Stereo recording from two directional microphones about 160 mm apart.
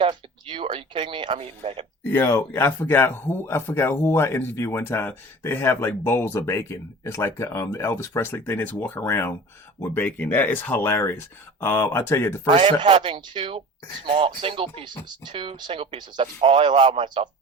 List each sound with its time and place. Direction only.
0.0 s speech: 30° right (ahead or behind)
2.0 s speech: 15° left (ahead or behind)
12.5 s speech: 35° right (ahead or behind)